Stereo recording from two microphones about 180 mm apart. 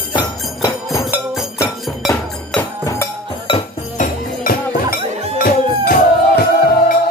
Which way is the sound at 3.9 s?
50° left (ahead or behind).